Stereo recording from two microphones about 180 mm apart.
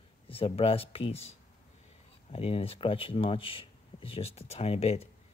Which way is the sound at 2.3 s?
30° left (ahead or behind).